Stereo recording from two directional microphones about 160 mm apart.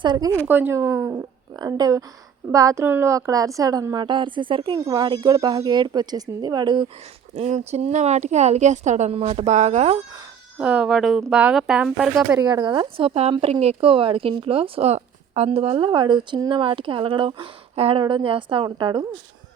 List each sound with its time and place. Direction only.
0.0 s a woman's voice: 25° right (ahead or behind)
0.4 s a woman's voice: 10° right (ahead or behind); by 6.9 s 30° right (ahead or behind)
7.3 s speech: 40° right (ahead or behind)
10.6 s a woman's voice: 5° right (ahead or behind)
12.4 s speech: 25° right (ahead or behind)